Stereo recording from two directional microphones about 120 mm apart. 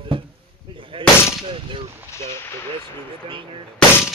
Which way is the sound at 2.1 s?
20° left (ahead or behind).